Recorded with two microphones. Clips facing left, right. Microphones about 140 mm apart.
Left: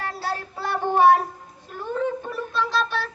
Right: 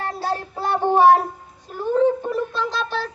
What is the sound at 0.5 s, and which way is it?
Child singing, 45° right (ahead or behind).